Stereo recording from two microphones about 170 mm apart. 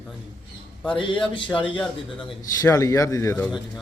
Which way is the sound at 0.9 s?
30° left (ahead or behind).